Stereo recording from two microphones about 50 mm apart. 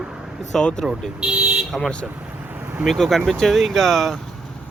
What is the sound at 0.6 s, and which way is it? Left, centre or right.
Speech, centre.